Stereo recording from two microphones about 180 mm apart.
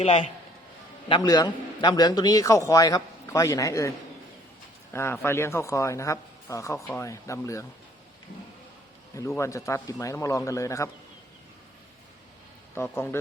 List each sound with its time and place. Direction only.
0.0 s a man's voice: 30° left (ahead or behind)
4.9 s a man's voice: 15° left (ahead or behind)
9.4 s a man's voice: 15° left (ahead or behind)
12.7 s a man's voice: 15° left (ahead or behind)